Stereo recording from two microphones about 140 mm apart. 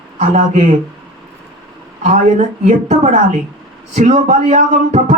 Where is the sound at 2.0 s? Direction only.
55° right (ahead or behind).